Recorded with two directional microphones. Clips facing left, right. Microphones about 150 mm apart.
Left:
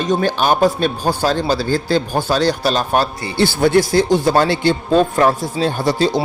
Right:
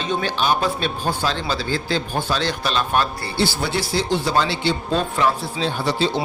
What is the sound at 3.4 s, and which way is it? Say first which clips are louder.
A man's voice: left 9 dB; 50° left (ahead or behind).